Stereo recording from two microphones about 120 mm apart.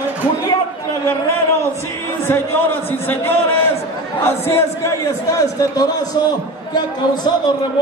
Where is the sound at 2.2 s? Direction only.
20° left (ahead or behind).